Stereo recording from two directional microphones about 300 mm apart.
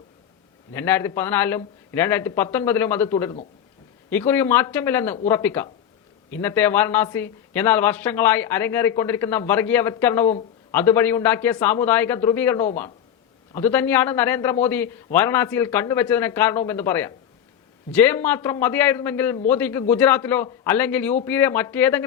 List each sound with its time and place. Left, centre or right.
0.7 s speech: centre